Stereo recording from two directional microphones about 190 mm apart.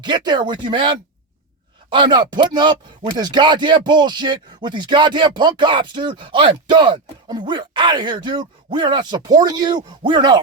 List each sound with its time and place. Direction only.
0.0 s speech: 25° right (ahead or behind)